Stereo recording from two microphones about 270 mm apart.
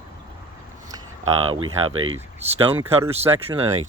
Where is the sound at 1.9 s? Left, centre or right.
Right.